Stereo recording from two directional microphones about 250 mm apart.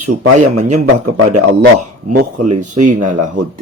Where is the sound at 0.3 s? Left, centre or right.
Right.